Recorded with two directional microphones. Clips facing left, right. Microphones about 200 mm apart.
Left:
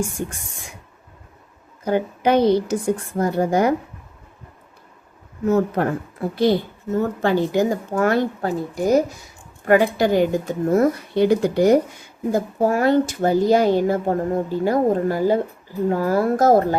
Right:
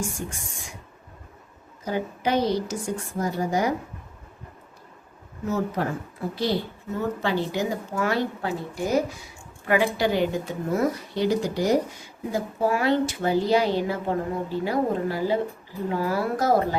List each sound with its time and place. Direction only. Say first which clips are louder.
0.2 s a woman's voice: left 6 dB; 55° left (ahead or behind)
1.8 s a woman's voice: left 7 dB; 60° left (ahead or behind)
5.5 s a woman's voice: left 7 dB; 55° left (ahead or behind)
12.3 s a woman's voice: left 5 dB; 45° left (ahead or behind)